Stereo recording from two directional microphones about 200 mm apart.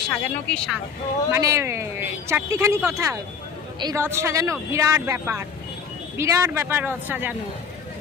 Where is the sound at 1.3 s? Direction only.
15° right (ahead or behind).